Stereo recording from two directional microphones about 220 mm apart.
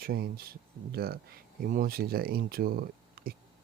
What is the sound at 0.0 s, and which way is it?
Speech, 45° right (ahead or behind).